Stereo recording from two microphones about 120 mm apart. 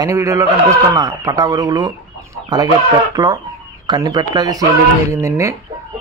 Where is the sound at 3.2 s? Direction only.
30° right (ahead or behind).